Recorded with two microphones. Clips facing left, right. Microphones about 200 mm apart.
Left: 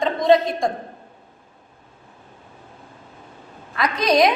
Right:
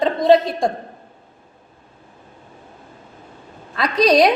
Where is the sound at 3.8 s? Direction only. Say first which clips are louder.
Right 3 dB; 30° right (ahead or behind).